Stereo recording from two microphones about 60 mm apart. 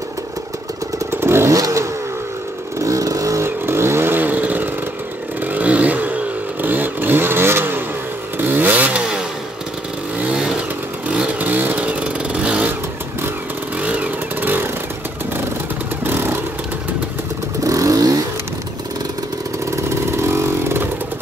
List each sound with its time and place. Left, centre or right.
1.1 s motorcycle: right
1.5 s vehicle: right
3.4 s vehicle: right
5.4 s a sound: right
6.6 s vehicle: right
8.4 s chainsaw: right
10.1 s vehicle: centre
13.7 s vehicle: right
17.6 s vehicle: right
19.7 s vehicle: right